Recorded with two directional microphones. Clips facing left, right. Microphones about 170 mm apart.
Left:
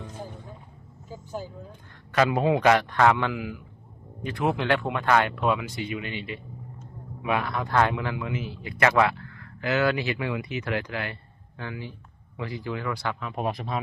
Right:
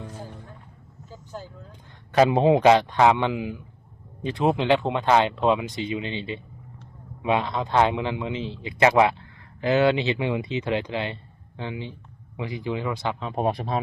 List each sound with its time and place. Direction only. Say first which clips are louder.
1.1 s speech: left 3 dB; 10° left (ahead or behind)
2.1 s a man's voice: right 4 dB; 25° right (ahead or behind)